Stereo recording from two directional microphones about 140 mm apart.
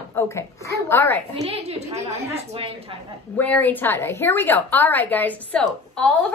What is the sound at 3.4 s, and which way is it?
A woman's voice, 10° left (ahead or behind).